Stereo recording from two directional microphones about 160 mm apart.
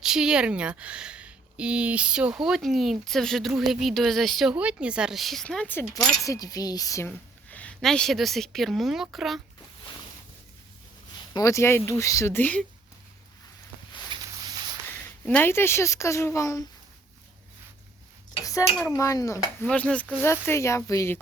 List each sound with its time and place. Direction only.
0.0 s speech: 5° right (ahead or behind); by 7.1 s 20° left (ahead or behind)
7.5 s speech: 10° left (ahead or behind)
11.3 s speech: 20° left (ahead or behind)
14.1 s a sound: 25° right (ahead or behind)
14.8 s speech: 10° left (ahead or behind)
18.9 s speech: 20° left (ahead or behind)
19.6 s speech: 10° left (ahead or behind)